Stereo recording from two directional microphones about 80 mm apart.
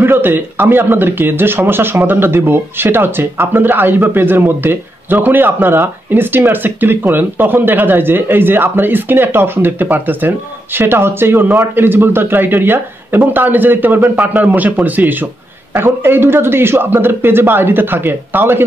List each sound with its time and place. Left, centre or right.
0.0 s speech: right